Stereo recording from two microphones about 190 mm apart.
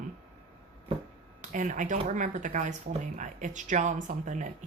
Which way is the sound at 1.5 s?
40° right (ahead or behind).